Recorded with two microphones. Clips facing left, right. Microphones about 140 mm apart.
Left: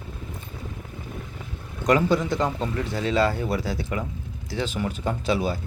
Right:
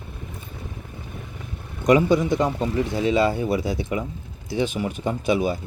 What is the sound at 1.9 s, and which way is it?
Speech, 15° right (ahead or behind).